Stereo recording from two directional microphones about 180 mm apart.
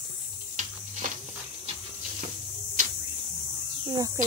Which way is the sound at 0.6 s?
45° right (ahead or behind).